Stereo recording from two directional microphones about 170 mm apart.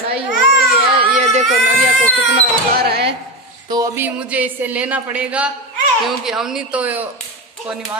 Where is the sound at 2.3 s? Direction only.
65° right (ahead or behind).